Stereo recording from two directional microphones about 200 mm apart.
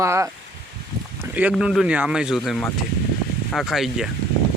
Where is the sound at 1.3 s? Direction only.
5° right (ahead or behind).